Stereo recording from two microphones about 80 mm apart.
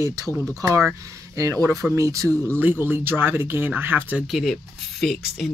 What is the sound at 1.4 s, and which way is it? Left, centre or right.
Speech, right.